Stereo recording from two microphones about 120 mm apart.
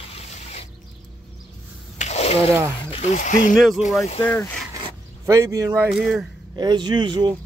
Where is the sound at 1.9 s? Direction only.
70° left (ahead or behind).